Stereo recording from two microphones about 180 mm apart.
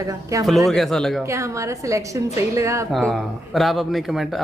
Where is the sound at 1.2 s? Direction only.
15° right (ahead or behind).